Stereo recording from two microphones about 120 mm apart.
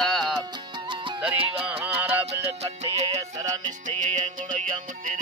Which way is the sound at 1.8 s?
15° right (ahead or behind).